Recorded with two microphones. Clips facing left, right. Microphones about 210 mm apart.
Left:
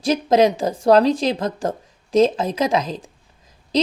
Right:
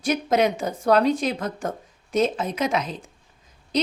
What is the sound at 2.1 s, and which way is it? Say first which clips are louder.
Speech: left 6 dB; 90° left.